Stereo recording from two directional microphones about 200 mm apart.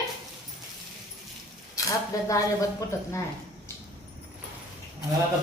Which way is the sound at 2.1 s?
15° left (ahead or behind).